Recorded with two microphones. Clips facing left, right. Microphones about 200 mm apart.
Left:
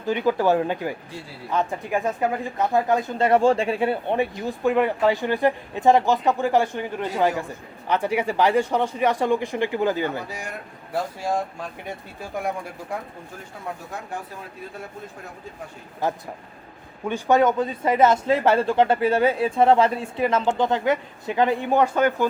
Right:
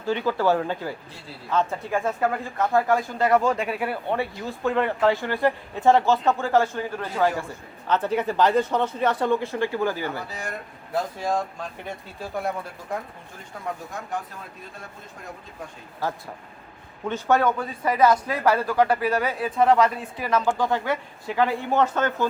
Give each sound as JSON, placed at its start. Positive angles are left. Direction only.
{"t": 0.0, "sound": "speech", "side_deg": 15}
{"t": 16.0, "sound": "speech", "side_deg": 20}